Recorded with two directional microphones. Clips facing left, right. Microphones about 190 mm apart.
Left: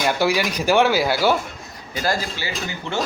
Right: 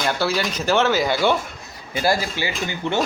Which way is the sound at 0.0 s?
15° left (ahead or behind).